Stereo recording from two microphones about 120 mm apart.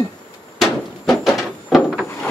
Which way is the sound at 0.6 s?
Centre (ahead or behind).